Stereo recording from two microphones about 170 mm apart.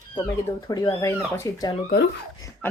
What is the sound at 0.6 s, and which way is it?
A woman's voice, 20° left (ahead or behind).